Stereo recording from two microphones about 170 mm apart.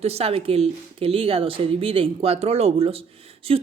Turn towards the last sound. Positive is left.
turn(degrees=-35)  # may be behind; listen again after turning